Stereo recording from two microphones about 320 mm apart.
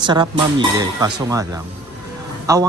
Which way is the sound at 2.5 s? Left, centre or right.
Centre.